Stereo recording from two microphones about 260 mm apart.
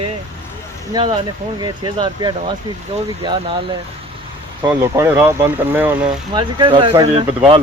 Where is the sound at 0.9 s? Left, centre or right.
Centre.